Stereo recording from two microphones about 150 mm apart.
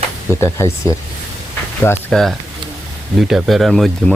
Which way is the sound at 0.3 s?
15° left (ahead or behind).